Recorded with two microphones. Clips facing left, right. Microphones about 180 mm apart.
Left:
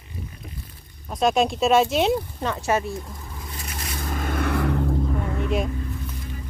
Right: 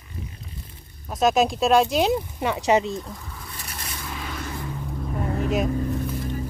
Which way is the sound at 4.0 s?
50° left (ahead or behind).